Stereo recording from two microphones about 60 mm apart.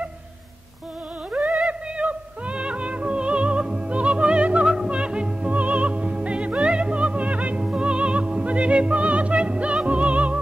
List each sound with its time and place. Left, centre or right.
1.3 s music: right